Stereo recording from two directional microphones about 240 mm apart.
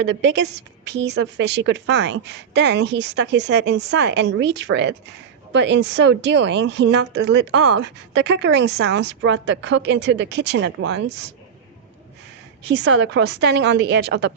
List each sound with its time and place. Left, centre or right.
0.0 s a woman's voice: right
12.6 s a woman's voice: right